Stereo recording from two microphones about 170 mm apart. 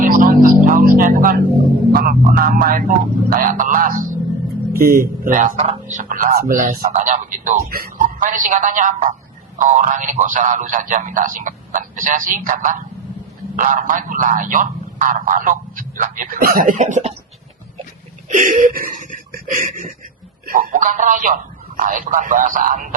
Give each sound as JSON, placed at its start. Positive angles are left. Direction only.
{"t": 0.0, "sound": "speech", "side_deg": -55}
{"t": 18.3, "sound": "speech", "side_deg": -50}